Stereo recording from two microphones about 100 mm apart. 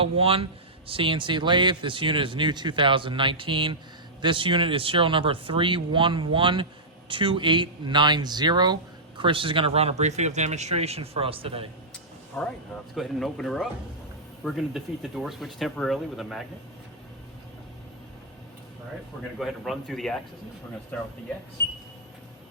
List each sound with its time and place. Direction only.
0.0 s a man's voice: 70° right (ahead or behind)
12.4 s speech: 5° left (ahead or behind)
19.4 s speech: centre (ahead or behind); by 21.1 s 15° left (ahead or behind)